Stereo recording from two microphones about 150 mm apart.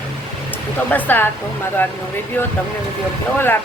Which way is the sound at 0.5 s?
10° left (ahead or behind).